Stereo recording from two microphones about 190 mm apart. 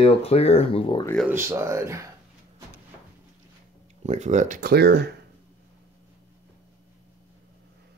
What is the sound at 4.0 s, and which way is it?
Speech, 35° right (ahead or behind).